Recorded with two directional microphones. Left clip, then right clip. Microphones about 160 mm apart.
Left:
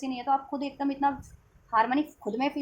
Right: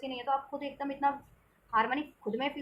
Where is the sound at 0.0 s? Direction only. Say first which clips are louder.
Left 5 dB; 50° left (ahead or behind).